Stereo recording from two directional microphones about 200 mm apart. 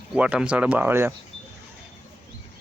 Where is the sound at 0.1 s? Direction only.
5° right (ahead or behind).